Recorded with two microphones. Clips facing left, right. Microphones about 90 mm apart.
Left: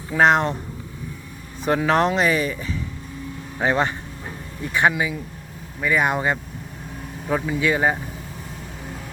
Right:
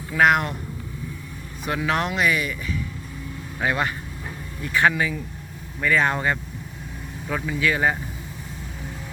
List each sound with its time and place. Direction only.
0.1 s speech: 30° left (ahead or behind)
1.6 s speech: 35° left (ahead or behind)
3.6 s speech: 30° left (ahead or behind)